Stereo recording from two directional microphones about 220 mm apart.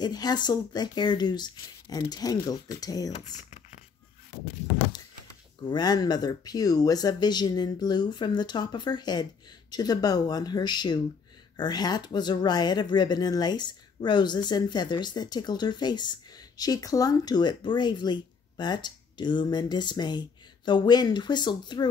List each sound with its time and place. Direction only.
0.0 s speech: 20° left (ahead or behind)
3.3 s a sound: 30° left (ahead or behind)
5.7 s speech: 20° left (ahead or behind)